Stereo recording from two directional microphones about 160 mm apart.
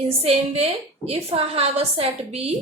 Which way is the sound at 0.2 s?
40° right (ahead or behind).